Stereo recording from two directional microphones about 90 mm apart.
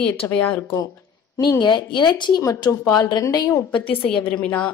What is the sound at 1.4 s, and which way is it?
A woman's voice, 50° left (ahead or behind).